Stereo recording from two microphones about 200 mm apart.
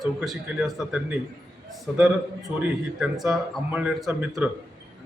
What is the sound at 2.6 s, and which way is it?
A man's voice, 5° right (ahead or behind).